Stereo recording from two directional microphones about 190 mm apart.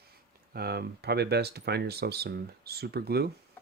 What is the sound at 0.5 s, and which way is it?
Speech, 55° right (ahead or behind).